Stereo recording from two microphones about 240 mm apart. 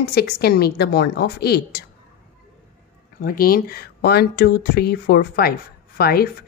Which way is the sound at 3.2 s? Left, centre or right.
Left.